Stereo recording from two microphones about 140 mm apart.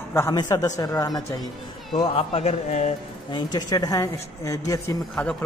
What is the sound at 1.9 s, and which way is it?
A man's voice, 40° left (ahead or behind).